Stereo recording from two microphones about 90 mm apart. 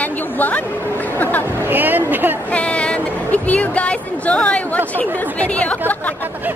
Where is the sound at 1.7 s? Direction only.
20° right (ahead or behind).